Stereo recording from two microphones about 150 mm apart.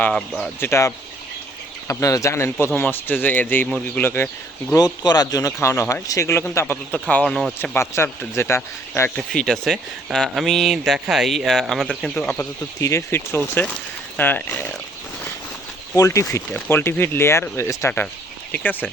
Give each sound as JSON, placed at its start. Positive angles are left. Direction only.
{"t": 0.0, "sound": "speech", "side_deg": 5}
{"t": 0.6, "sound": "speech", "side_deg": 15}
{"t": 4.0, "sound": "speech", "side_deg": 15}
{"t": 4.7, "sound": "speech", "side_deg": 25}
{"t": 7.6, "sound": "speech", "side_deg": 15}
{"t": 9.1, "sound": "speech", "side_deg": 5}
{"t": 16.0, "sound": "speech", "side_deg": 20}